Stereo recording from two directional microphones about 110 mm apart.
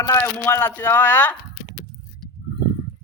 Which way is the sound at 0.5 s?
15° left (ahead or behind).